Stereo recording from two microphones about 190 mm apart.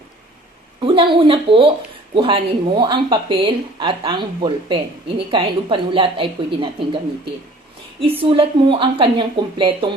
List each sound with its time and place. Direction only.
0.8 s speech: 25° right (ahead or behind)
8.2 s speech: 30° right (ahead or behind)